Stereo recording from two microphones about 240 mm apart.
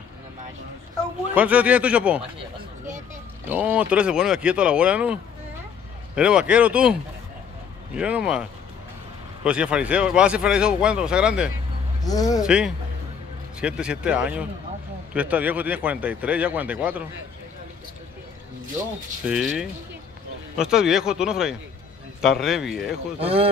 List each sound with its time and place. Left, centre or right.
1.3 s speech: centre
3.4 s speech: centre
12.0 s speech: centre
12.4 s speech: centre
19.2 s speech: centre
23.1 s speech: right